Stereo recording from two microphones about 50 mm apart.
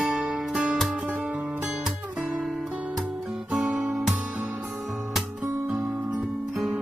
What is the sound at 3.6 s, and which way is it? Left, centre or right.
Guitar, centre.